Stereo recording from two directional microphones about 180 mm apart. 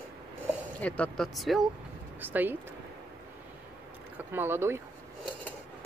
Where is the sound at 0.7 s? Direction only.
5° left (ahead or behind); by 2.5 s 10° right (ahead or behind).